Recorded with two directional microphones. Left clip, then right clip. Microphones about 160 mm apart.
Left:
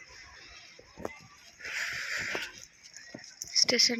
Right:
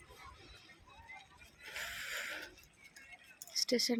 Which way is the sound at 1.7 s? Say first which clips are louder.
Left 8 dB; 10° right (ahead or behind).